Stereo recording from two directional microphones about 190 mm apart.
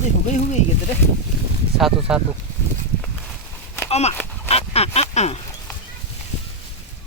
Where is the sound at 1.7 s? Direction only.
5° right (ahead or behind).